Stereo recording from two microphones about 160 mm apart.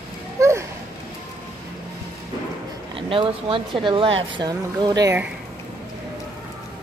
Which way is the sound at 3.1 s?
35° right (ahead or behind).